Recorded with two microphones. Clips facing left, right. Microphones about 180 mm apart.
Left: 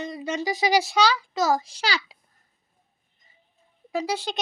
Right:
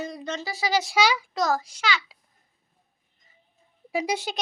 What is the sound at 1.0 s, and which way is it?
Speech, 10° right (ahead or behind).